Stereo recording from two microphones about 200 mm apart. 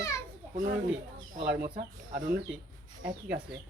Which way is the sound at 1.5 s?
50° right (ahead or behind).